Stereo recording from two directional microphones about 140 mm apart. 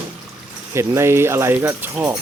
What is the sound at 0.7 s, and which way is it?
Speech, 20° right (ahead or behind).